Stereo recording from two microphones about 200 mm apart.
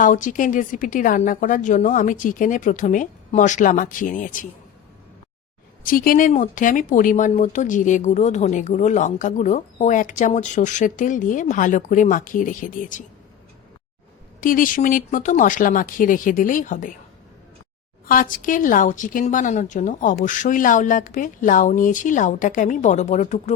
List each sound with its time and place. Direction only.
0.0 s speech: 40° left (ahead or behind)
5.8 s speech: 45° left (ahead or behind)
14.4 s speech: 45° left (ahead or behind)
18.0 s speech: 45° left (ahead or behind)